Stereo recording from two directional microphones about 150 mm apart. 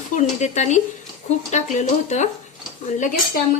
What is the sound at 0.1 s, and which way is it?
A woman's voice, 50° left (ahead or behind).